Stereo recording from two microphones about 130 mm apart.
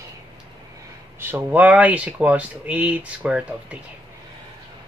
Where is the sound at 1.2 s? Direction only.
15° right (ahead or behind).